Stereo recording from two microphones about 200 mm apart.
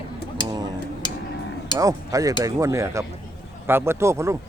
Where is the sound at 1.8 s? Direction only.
15° right (ahead or behind).